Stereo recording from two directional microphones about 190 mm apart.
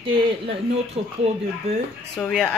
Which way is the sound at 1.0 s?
30° right (ahead or behind).